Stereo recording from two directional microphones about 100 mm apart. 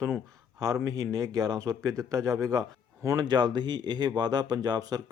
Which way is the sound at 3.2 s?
50° right (ahead or behind).